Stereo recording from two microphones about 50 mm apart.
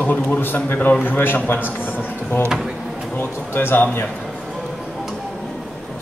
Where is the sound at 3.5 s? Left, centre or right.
Left.